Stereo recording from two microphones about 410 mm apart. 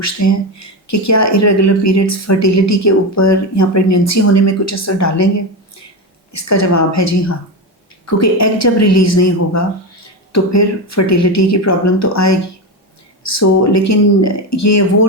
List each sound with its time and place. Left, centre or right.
0.0 s speech: left
6.3 s speech: left